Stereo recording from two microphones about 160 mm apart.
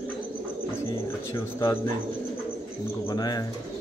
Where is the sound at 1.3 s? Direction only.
25° left (ahead or behind).